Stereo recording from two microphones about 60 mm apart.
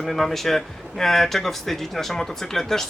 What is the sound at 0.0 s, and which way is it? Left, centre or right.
Speech, centre.